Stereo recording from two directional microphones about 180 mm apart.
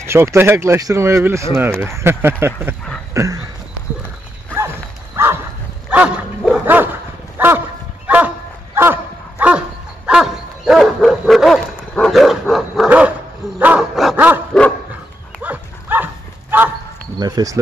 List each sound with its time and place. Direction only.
0.0 s speech: 15° right (ahead or behind)
4.6 s dog: 15° right (ahead or behind)
15.4 s dog: 10° right (ahead or behind)
17.2 s speech: 20° right (ahead or behind)